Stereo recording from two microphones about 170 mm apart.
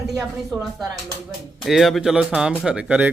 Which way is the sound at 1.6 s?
Centre (ahead or behind).